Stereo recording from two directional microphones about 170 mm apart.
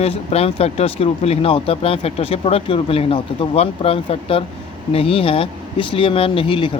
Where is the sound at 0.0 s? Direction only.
35° left (ahead or behind).